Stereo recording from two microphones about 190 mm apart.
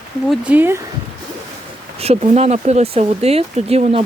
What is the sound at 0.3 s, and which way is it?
Speech, 10° right (ahead or behind).